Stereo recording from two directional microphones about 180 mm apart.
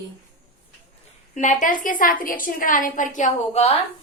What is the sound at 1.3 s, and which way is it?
A woman's voice, 45° left (ahead or behind).